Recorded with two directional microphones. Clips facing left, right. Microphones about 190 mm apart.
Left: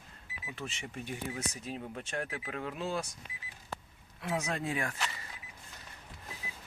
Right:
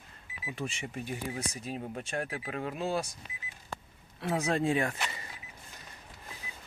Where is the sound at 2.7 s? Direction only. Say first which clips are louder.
Right 4 dB; 40° right (ahead or behind).